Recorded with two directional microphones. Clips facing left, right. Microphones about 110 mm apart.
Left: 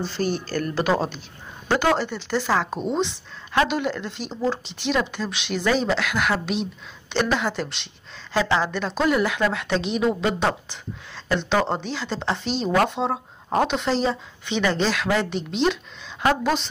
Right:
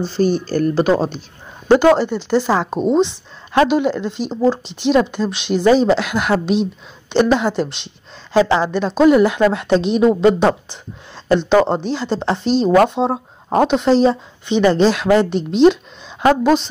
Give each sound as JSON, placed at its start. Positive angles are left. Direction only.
{"t": 0.1, "sound": "speech", "side_deg": -30}